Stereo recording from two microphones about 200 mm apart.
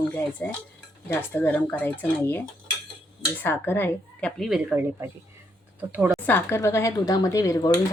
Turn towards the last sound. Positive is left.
turn(degrees=15)  # may be behind; listen again after turning